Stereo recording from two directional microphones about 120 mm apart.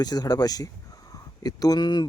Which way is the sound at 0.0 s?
35° left (ahead or behind).